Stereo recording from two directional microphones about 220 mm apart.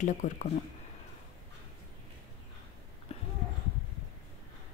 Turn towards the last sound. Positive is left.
turn(degrees=25)  # may be behind; listen again after turning